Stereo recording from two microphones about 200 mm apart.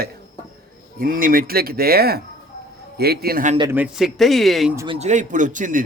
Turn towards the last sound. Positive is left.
turn(degrees=-40)  # may be behind; listen again after turning